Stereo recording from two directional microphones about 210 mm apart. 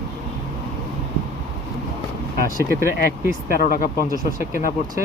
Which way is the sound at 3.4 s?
40° left (ahead or behind).